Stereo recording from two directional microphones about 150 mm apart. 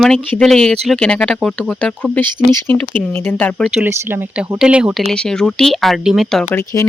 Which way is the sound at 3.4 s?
Centre (ahead or behind).